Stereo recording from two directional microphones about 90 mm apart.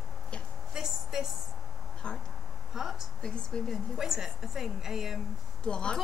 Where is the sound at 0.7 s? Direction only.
5° right (ahead or behind).